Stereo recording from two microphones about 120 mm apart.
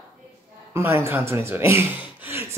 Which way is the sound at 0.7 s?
20° right (ahead or behind).